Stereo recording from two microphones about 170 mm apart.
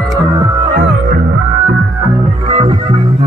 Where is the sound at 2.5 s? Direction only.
30° right (ahead or behind).